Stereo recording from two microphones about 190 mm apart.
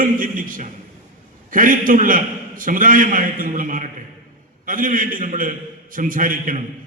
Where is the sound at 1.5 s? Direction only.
45° right (ahead or behind).